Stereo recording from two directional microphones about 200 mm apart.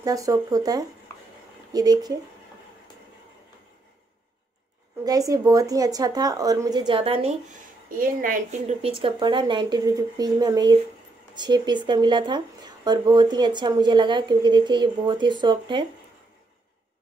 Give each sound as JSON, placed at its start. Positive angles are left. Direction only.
{"t": 0.0, "sound": "a woman's voice", "side_deg": -15}
{"t": 5.0, "sound": "a woman's voice", "side_deg": -15}
{"t": 7.9, "sound": "speech", "side_deg": -45}